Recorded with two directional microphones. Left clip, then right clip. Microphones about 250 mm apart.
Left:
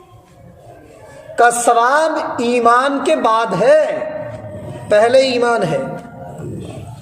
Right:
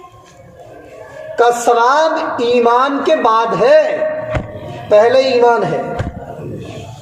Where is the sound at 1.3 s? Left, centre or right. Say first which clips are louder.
Even; left.